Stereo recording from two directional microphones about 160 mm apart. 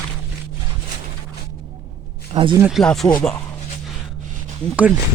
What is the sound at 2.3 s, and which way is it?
Speech, 30° right (ahead or behind).